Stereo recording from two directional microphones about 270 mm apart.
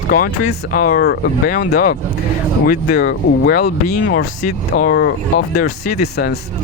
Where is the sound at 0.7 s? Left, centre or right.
Left.